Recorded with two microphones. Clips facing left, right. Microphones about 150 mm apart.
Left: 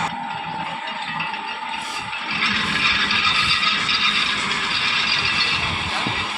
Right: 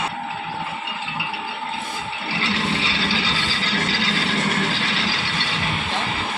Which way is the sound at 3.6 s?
50° right (ahead or behind).